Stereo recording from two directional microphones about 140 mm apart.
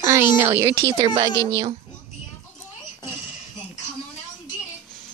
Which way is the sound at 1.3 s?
25° right (ahead or behind).